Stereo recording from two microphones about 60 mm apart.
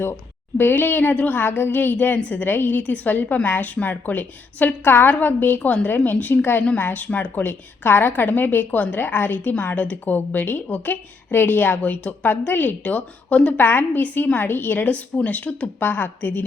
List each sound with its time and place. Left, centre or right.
0.5 s a woman's voice: left
13.6 s a woman's voice: left
14.8 s a woman's voice: left